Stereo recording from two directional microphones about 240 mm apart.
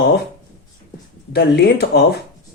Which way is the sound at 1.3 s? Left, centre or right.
Left.